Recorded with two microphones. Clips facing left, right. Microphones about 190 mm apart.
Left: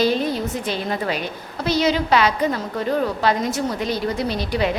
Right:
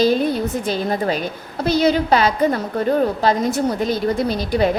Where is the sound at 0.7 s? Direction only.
40° right (ahead or behind).